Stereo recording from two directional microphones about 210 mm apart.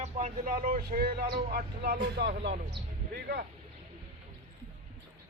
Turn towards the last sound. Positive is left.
turn(degrees=-50)  # may be behind; listen again after turning